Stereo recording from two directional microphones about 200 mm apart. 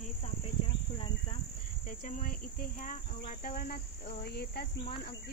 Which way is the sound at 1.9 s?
40° left (ahead or behind).